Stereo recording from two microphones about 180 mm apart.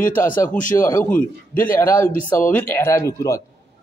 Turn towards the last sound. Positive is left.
turn(degrees=15)  # may be behind; listen again after turning